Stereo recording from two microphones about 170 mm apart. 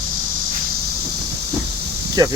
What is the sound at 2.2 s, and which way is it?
Speech, 20° right (ahead or behind).